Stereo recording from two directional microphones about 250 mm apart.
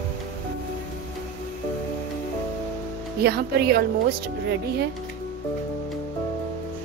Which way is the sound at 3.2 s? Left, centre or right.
Right.